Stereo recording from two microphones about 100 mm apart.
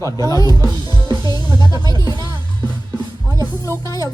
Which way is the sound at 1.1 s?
50° right (ahead or behind).